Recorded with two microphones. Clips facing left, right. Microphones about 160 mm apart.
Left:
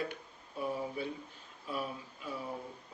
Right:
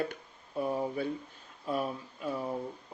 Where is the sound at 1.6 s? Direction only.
45° right (ahead or behind).